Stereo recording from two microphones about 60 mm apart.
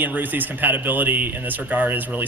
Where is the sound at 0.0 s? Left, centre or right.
Right.